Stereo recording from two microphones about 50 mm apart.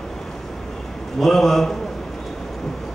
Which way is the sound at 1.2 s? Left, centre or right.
Centre.